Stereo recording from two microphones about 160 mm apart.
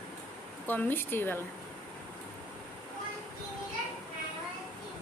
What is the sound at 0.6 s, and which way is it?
Speech, 10° left (ahead or behind).